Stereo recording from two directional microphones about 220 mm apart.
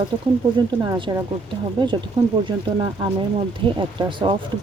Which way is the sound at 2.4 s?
20° right (ahead or behind).